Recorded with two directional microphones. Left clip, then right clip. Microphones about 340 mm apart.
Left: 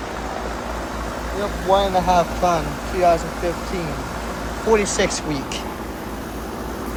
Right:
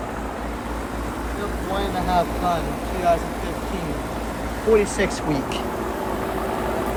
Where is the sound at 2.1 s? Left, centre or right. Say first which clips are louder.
Left 4 dB; centre.